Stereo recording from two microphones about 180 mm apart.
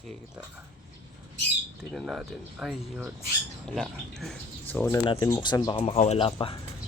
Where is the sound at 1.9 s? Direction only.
Centre (ahead or behind).